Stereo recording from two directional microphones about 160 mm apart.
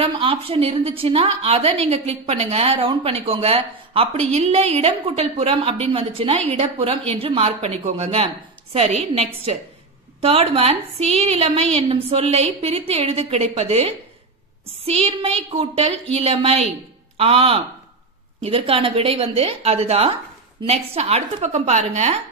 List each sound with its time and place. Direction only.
0.0 s a woman's voice: 35° right (ahead or behind)